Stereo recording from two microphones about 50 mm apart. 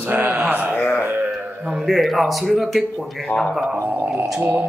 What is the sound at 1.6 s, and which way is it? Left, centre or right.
Speech, centre.